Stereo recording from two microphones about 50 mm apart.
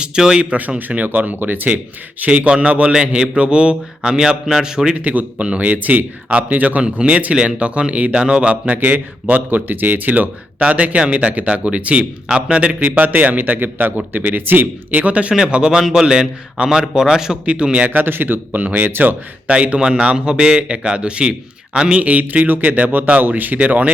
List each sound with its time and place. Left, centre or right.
0.0 s a man's voice: centre
0.9 s a man's voice: right
2.2 s a man's voice: right
5.0 s a man's voice: right; by 17.3 s centre
17.4 s speech: right
18.0 s a man's voice: right
19.5 s a man's voice: right